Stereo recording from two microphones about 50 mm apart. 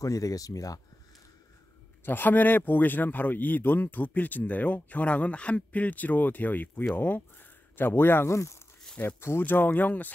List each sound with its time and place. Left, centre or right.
2.0 s a man's voice: left
8.3 s speech: left
9.0 s speech: left
9.4 s speech: left